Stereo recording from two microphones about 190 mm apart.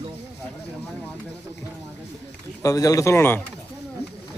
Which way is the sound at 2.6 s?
20° left (ahead or behind).